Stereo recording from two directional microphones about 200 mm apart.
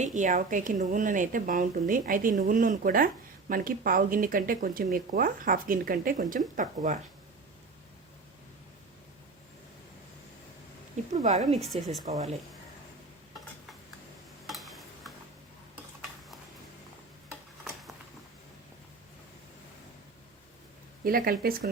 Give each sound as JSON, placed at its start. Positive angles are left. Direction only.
{"t": 0.0, "sound": "a woman's voice", "side_deg": -40}
{"t": 11.1, "sound": "a woman's voice", "side_deg": -35}
{"t": 14.4, "sound": "stir", "side_deg": 0}
{"t": 21.0, "sound": "speech", "side_deg": -45}